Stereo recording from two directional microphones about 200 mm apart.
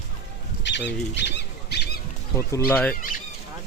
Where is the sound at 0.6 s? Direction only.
60° left (ahead or behind).